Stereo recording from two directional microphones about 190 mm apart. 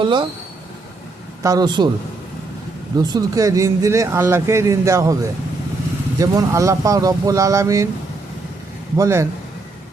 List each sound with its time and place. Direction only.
0.0 s a man's voice: 25° right (ahead or behind)
1.4 s a man's voice: 20° right (ahead or behind)
3.0 s speech: 20° right (ahead or behind)
9.0 s speech: 15° right (ahead or behind)